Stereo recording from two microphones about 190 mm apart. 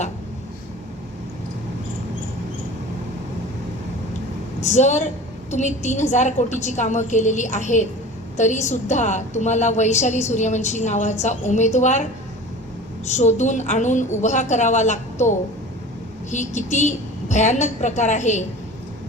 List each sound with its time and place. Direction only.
4.6 s a woman's voice: 40° left (ahead or behind)
13.1 s a woman's voice: 40° left (ahead or behind)